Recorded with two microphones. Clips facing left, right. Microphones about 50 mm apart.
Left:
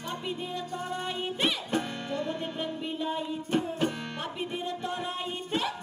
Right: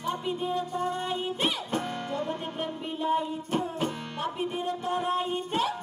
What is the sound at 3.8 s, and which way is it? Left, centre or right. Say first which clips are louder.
Music: even; left.